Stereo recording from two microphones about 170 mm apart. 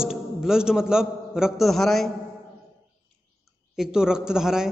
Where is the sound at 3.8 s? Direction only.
5° right (ahead or behind).